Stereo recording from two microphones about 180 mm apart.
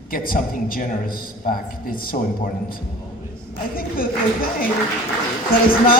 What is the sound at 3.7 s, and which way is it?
Speech, 55° left (ahead or behind).